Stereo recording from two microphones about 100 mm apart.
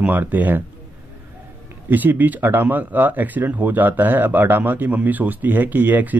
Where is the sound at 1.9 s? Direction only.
15° right (ahead or behind).